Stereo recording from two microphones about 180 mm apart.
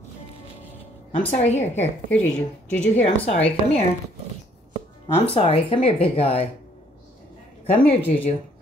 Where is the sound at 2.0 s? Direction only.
5° left (ahead or behind).